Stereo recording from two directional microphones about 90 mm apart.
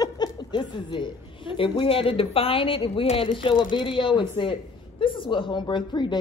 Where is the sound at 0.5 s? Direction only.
65° left (ahead or behind).